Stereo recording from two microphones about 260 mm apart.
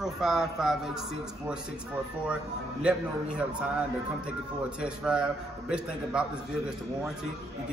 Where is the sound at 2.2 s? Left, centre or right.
Centre.